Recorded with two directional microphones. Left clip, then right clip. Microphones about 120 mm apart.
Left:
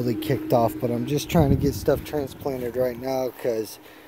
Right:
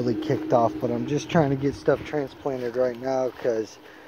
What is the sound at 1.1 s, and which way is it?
Speech, 35° left (ahead or behind).